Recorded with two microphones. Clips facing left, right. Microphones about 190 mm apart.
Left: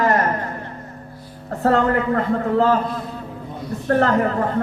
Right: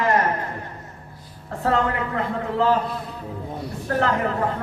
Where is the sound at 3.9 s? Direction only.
50° left (ahead or behind).